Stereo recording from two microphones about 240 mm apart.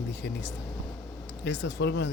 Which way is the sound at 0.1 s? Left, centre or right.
Left.